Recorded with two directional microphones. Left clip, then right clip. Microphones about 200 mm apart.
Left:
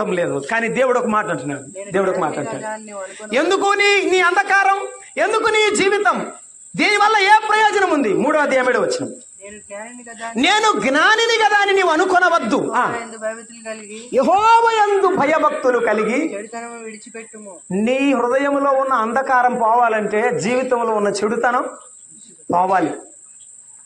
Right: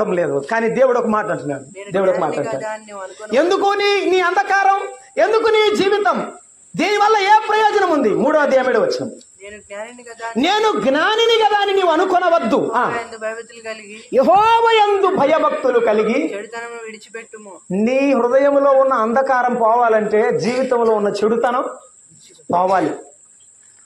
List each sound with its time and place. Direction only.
0.0 s a man's voice: 25° left (ahead or behind)
2.4 s speech: 65° right (ahead or behind)
3.3 s a man's voice: 20° left (ahead or behind)
10.3 s a man's voice: 20° left (ahead or behind)
13.1 s speech: 65° right (ahead or behind)
13.9 s a man's voice: 20° left (ahead or behind)
16.3 s speech: 60° right (ahead or behind)
17.6 s a man's voice: 20° left (ahead or behind)